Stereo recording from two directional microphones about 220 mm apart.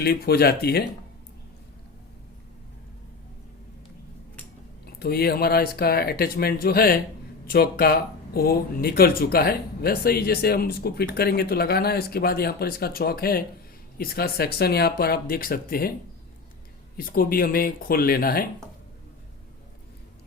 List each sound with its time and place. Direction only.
0.0 s speech: 45° left (ahead or behind)
4.9 s speech: 45° left (ahead or behind)
17.0 s speech: 40° left (ahead or behind)